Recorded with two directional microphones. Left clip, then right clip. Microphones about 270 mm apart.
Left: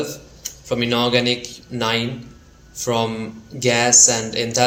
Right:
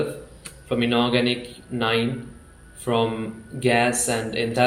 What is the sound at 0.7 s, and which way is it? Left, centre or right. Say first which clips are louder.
A man's voice: left 3 dB; left.